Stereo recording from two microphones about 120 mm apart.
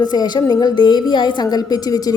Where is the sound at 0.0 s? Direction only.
35° left (ahead or behind).